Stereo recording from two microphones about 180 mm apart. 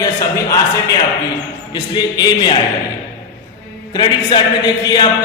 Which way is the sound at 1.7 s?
25° left (ahead or behind).